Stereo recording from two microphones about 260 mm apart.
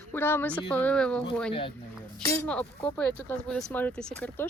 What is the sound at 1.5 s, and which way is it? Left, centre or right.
Speech, left.